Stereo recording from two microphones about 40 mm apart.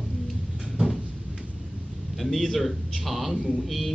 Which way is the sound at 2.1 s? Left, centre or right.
Centre.